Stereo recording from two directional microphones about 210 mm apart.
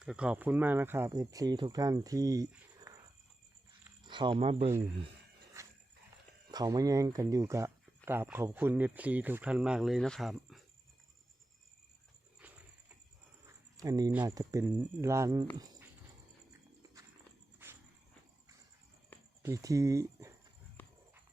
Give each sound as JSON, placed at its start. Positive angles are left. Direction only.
{"t": 0.0, "sound": "speech", "side_deg": -5}
{"t": 2.5, "sound": "a sound", "side_deg": -15}
{"t": 4.0, "sound": "speech", "side_deg": -20}
{"t": 5.6, "sound": "dog", "side_deg": -15}
{"t": 6.5, "sound": "speech", "side_deg": -15}
{"t": 12.4, "sound": "a sound", "side_deg": -5}
{"t": 13.7, "sound": "speech", "side_deg": -15}
{"t": 17.6, "sound": "walk", "side_deg": -10}
{"t": 19.4, "sound": "speech", "side_deg": -15}
{"t": 20.8, "sound": "horse", "side_deg": 10}